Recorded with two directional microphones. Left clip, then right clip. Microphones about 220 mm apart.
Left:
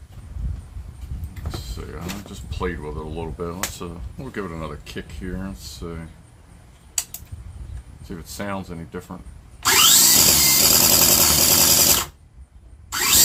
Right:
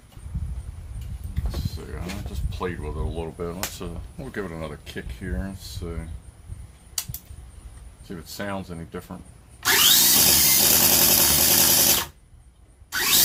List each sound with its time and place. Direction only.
1.9 s speech: centre (ahead or behind)
8.1 s speech: 5° right (ahead or behind)
9.7 s a sound: 15° left (ahead or behind)